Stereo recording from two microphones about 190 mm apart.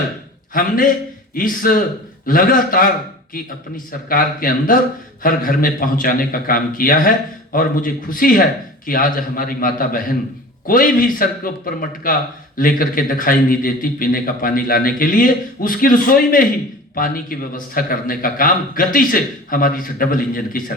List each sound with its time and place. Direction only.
0.5 s a man's voice: 45° left (ahead or behind)
4.1 s a man's voice: 50° left (ahead or behind)